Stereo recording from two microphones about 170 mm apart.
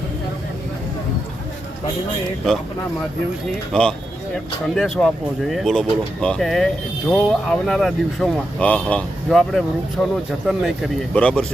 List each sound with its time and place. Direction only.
3.7 s speech: 5° left (ahead or behind)